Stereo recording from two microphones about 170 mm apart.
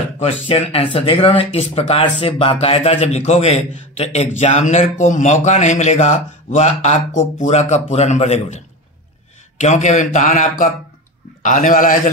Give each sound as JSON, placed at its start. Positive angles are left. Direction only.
{"t": 0.2, "sound": "a man's voice", "side_deg": 35}